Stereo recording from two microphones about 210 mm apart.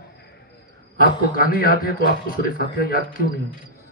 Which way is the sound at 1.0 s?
45° left (ahead or behind).